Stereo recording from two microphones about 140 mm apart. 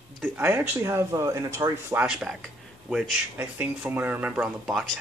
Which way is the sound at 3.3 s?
15° right (ahead or behind).